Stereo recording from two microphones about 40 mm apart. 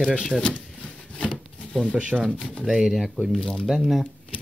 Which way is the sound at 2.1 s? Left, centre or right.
Centre.